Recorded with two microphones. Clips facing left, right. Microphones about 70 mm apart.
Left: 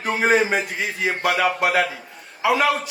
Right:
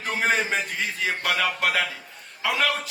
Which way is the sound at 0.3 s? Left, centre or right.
Centre.